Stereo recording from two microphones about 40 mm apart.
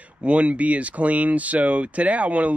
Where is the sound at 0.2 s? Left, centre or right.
Right.